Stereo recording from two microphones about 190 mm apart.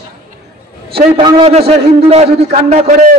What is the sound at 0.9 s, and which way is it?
A man's voice, 30° right (ahead or behind).